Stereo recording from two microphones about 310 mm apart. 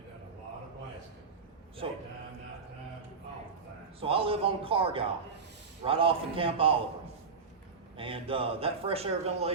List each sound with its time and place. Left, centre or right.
1.8 s a man's voice: centre
4.0 s a man's voice: centre
7.9 s a man's voice: centre